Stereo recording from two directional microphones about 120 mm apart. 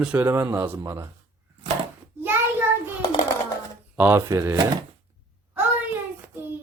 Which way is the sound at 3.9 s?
15° right (ahead or behind).